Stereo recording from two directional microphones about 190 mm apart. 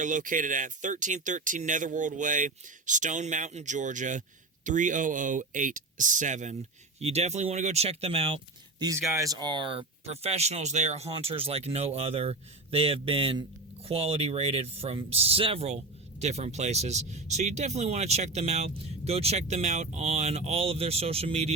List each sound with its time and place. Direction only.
0.0 s speech: 40° right (ahead or behind)
8.8 s speech: 15° right (ahead or behind); by 21.5 s 30° right (ahead or behind)